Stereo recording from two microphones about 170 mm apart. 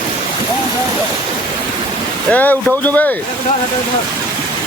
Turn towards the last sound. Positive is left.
turn(degrees=10)  # may be behind; listen again after turning